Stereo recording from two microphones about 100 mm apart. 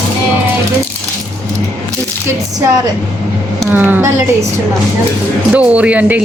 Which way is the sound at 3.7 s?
15° right (ahead or behind).